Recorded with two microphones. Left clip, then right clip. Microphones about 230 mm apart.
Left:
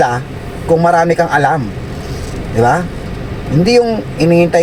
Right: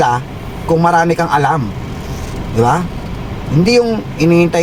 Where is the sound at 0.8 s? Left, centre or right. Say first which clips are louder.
Left 1 dB; centre.